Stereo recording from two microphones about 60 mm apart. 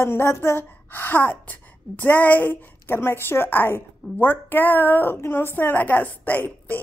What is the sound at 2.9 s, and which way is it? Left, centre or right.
A woman's voice, left.